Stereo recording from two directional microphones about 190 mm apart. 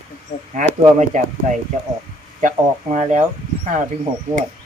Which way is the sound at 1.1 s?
40° right (ahead or behind).